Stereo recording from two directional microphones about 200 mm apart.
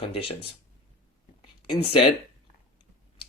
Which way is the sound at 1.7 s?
25° left (ahead or behind).